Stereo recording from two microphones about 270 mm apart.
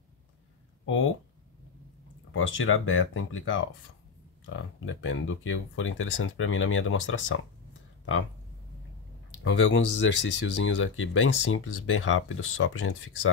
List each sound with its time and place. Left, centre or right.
2.3 s speech: left
9.4 s speech: left